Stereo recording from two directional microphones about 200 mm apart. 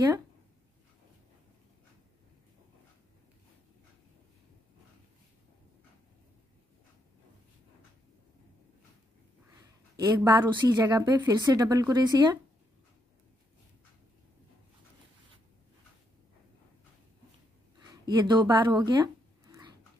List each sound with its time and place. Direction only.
9.6 s a woman's voice: 20° right (ahead or behind)
18.0 s a woman's voice: 20° right (ahead or behind)
18.9 s a sound: 20° right (ahead or behind)